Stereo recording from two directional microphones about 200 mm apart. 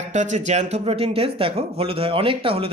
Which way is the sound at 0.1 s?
35° right (ahead or behind).